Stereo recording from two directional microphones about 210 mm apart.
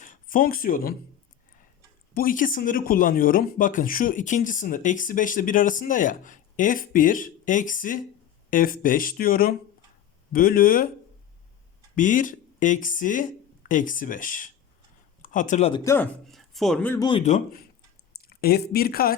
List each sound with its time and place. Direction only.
0.0 s speech: 40° left (ahead or behind)
2.1 s speech: 40° left (ahead or behind)
11.9 s speech: 40° left (ahead or behind)
15.7 s speech: 15° left (ahead or behind)
16.3 s speech: centre (ahead or behind)
17.0 s speech: 25° left (ahead or behind)
18.2 s speech: 45° left (ahead or behind)